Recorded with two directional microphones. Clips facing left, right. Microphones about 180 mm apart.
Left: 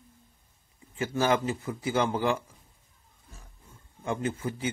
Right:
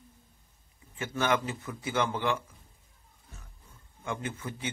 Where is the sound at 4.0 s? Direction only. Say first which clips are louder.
Left 5 dB; 35° left (ahead or behind).